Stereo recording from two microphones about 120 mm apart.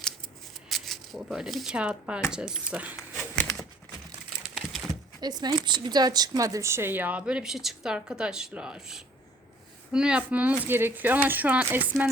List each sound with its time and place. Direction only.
0.7 s speech: centre (ahead or behind)
5.2 s speech: 35° right (ahead or behind); by 12.0 s 15° right (ahead or behind)